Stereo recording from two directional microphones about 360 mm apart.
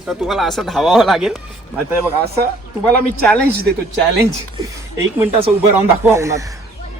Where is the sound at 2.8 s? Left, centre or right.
Centre.